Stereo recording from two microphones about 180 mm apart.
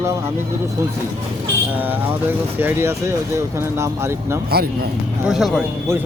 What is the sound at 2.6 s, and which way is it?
Speech, 15° right (ahead or behind).